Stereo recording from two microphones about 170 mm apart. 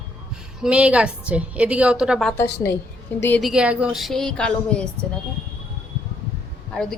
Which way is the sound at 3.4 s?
5° right (ahead or behind).